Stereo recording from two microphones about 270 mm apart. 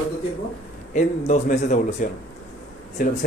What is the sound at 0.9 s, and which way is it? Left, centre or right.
Speech, left.